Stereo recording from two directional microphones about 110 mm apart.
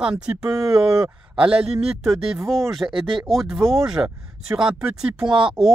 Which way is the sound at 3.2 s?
Centre (ahead or behind).